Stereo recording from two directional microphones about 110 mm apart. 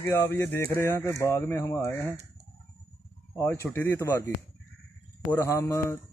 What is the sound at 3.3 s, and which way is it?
Speech, 25° left (ahead or behind).